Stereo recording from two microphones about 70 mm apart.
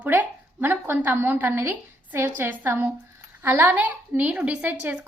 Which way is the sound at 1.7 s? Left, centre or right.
Right.